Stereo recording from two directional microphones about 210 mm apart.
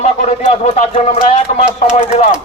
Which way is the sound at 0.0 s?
30° left (ahead or behind).